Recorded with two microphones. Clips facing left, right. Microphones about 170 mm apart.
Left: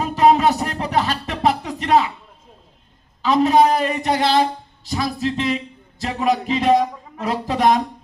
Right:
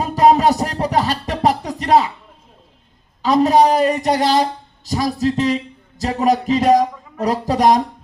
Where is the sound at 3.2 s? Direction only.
40° right (ahead or behind).